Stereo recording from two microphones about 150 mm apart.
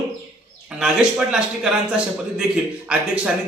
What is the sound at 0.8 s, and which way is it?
A man's voice, 5° right (ahead or behind).